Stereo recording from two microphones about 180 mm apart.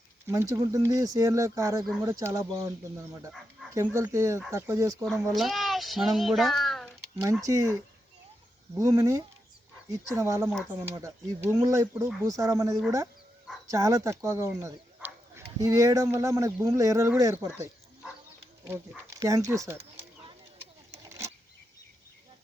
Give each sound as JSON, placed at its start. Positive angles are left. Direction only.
{"t": 0.3, "sound": "speech", "side_deg": -15}
{"t": 1.8, "sound": "speech", "side_deg": 0}
{"t": 2.0, "sound": "speech", "side_deg": -15}
{"t": 5.3, "sound": "a child's voice", "side_deg": 0}
{"t": 7.4, "sound": "speech", "side_deg": -15}
{"t": 8.8, "sound": "speech", "side_deg": -20}
{"t": 18.7, "sound": "speech", "side_deg": -20}